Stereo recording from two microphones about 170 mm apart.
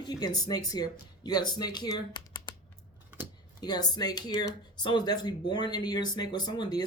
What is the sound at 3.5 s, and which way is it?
Speech, 25° left (ahead or behind).